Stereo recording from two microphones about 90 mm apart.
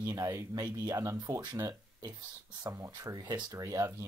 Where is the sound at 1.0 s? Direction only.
35° right (ahead or behind).